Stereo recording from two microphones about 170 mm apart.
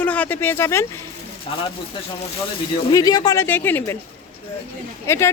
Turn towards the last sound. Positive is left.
turn(degrees=15)  # may be behind; listen again after turning